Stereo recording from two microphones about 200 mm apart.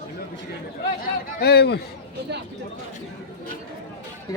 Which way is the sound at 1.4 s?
55° left (ahead or behind).